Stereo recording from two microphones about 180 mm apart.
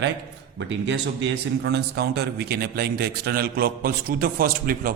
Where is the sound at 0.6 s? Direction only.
85° right.